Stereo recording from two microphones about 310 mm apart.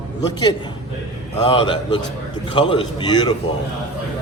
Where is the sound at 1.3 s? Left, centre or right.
Centre.